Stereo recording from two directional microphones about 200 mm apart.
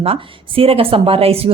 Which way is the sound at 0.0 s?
30° right (ahead or behind).